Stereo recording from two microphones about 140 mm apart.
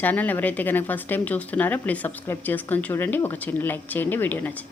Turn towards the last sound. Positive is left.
turn(degrees=15)  # may be behind; listen again after turning